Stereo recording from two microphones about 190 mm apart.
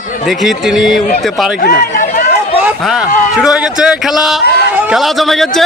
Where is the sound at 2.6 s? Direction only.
Centre (ahead or behind).